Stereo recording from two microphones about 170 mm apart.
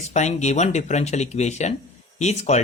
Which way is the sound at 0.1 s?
40° left (ahead or behind).